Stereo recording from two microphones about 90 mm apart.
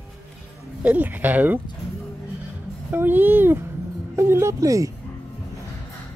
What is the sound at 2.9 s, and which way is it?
Speech, 20° right (ahead or behind).